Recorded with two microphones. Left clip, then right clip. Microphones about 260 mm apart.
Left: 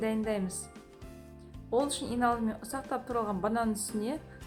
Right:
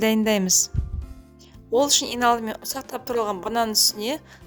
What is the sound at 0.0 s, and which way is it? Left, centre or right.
Speech, right.